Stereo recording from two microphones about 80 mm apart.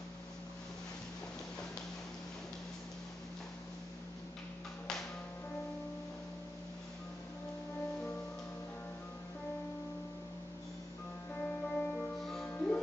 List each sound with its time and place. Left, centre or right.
11.4 s music: centre
12.4 s music: left